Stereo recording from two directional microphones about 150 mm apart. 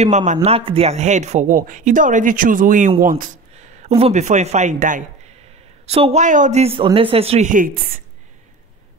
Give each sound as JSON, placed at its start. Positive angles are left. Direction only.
{"t": 0.0, "sound": "a man's voice", "side_deg": -50}
{"t": 5.9, "sound": "speech", "side_deg": -40}
{"t": 6.2, "sound": "speech", "side_deg": -55}
{"t": 7.4, "sound": "a woman's voice", "side_deg": -65}